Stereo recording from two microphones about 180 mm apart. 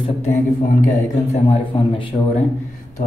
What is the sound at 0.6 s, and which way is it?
Speech, 45° left (ahead or behind).